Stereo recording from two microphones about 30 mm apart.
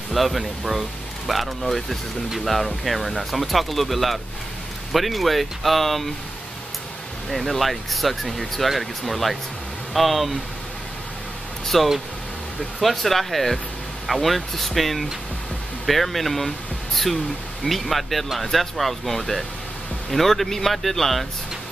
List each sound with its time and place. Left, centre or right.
0.1 s speech: centre
7.2 s speech: centre
11.6 s a man's voice: centre